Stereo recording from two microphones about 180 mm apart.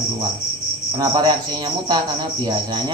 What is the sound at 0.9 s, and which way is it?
Speech, 25° right (ahead or behind).